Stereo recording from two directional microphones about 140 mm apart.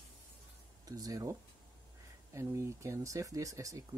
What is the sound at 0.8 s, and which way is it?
Speech, 25° right (ahead or behind).